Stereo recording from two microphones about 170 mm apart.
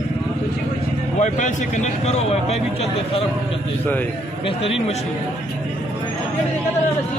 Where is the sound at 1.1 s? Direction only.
45° left (ahead or behind).